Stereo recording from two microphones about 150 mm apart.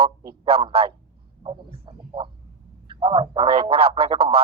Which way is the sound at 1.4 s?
35° right (ahead or behind).